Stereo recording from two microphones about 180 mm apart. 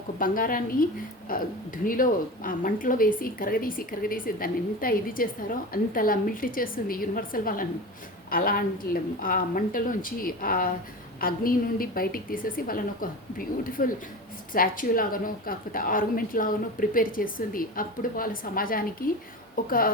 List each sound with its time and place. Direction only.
0.2 s speech: 50° left (ahead or behind)